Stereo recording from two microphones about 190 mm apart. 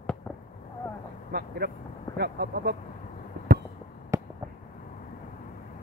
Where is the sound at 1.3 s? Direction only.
55° right (ahead or behind).